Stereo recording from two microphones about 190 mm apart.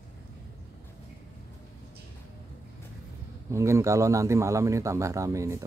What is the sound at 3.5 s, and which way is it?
A man's voice, 15° right (ahead or behind).